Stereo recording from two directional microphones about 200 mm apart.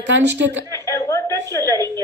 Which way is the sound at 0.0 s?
60° right (ahead or behind).